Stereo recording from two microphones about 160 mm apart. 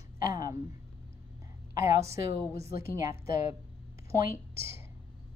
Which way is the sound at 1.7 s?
20° right (ahead or behind).